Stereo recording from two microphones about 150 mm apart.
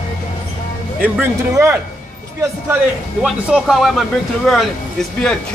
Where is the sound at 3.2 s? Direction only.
Centre (ahead or behind).